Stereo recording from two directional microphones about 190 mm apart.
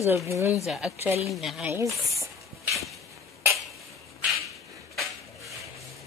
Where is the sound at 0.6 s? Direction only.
5° right (ahead or behind).